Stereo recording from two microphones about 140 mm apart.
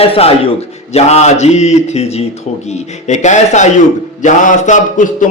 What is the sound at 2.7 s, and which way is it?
Speech, 55° left (ahead or behind).